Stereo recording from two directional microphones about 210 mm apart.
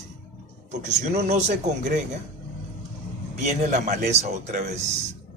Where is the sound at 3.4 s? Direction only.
35° right (ahead or behind).